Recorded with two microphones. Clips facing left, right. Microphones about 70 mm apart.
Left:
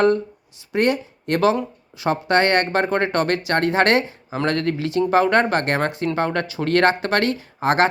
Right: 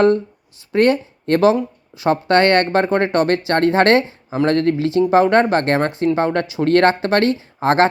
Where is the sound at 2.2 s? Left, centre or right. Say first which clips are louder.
Right 3 dB; right.